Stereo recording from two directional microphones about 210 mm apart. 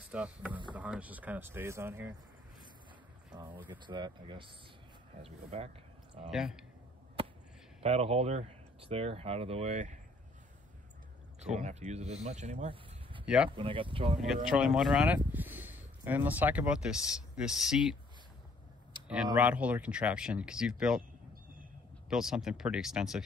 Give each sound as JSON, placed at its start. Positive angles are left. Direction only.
{"t": 0.1, "sound": "speech", "side_deg": -5}
{"t": 3.3, "sound": "speech", "side_deg": -20}
{"t": 6.3, "sound": "speech", "side_deg": 0}
{"t": 7.8, "sound": "speech", "side_deg": -30}
{"t": 11.4, "sound": "speech", "side_deg": -35}
{"t": 13.2, "sound": "speech", "side_deg": -5}
{"t": 13.5, "sound": "speech", "side_deg": -25}
{"t": 14.2, "sound": "speech", "side_deg": 0}
{"t": 19.3, "sound": "speech", "side_deg": -5}
{"t": 22.1, "sound": "speech", "side_deg": 0}